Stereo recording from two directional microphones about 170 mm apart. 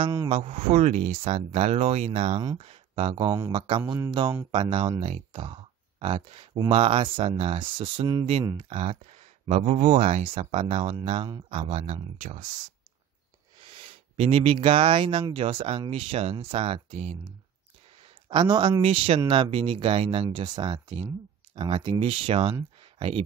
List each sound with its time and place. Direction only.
0.0 s speech: 25° right (ahead or behind)
0.3 s speech: 40° right (ahead or behind); by 3.5 s 20° right (ahead or behind)
3.5 s speech: 30° right (ahead or behind); by 12.4 s 45° right (ahead or behind)
13.7 s speech: 35° right (ahead or behind)
18.3 s speech: 25° right (ahead or behind)